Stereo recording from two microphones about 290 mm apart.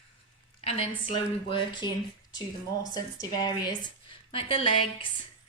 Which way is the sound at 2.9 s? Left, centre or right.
Centre.